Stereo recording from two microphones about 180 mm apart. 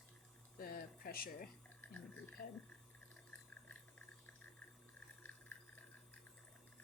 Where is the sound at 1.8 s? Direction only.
10° left (ahead or behind).